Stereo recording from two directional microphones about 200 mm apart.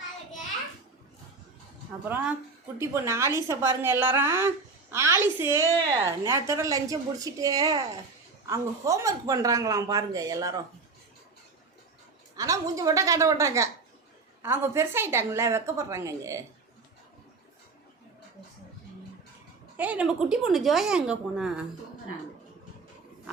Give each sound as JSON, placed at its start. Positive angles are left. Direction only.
{"t": 2.0, "sound": "a woman's voice", "side_deg": -10}
{"t": 12.4, "sound": "a woman's voice", "side_deg": -15}
{"t": 19.7, "sound": "a woman's voice", "side_deg": -10}